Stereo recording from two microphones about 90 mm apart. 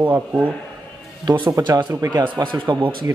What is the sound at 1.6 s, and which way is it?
Speech, 35° right (ahead or behind).